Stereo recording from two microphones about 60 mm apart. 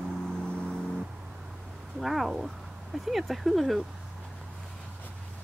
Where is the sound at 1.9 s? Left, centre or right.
Centre.